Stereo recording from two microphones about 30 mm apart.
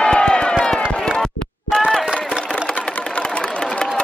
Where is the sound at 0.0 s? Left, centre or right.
Left.